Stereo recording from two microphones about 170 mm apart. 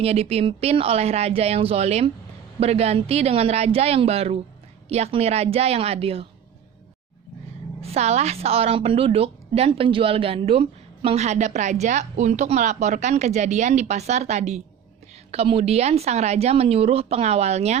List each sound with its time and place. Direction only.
0.0 s a woman's voice: 35° right (ahead or behind)
7.8 s a woman's voice: 40° right (ahead or behind)